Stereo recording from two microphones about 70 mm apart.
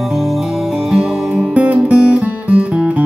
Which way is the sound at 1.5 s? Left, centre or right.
Centre.